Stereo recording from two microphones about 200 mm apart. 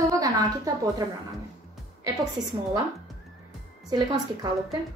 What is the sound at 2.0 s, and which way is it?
Speech, 20° right (ahead or behind).